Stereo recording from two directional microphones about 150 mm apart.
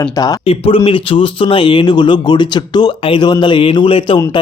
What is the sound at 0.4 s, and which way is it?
A man's voice, 35° left (ahead or behind).